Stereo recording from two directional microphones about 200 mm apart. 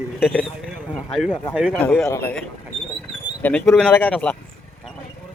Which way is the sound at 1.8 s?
10° left (ahead or behind).